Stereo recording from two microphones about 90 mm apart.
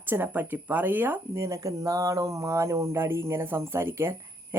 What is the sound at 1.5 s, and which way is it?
Speech, 35° right (ahead or behind).